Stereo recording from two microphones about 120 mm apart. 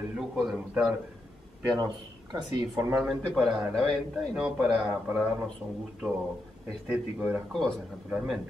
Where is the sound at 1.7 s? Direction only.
35° right (ahead or behind).